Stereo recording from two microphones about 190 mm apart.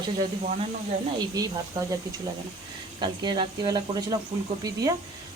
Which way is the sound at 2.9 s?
25° right (ahead or behind).